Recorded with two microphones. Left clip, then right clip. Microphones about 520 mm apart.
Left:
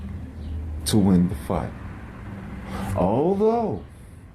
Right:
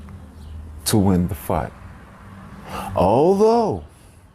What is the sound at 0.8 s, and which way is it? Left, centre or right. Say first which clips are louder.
Speech: right 2 dB; right.